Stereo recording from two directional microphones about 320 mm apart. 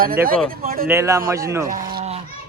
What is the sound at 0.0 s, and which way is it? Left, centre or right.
Speech, right.